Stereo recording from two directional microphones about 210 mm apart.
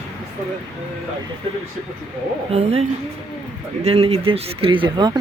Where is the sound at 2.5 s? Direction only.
30° right (ahead or behind).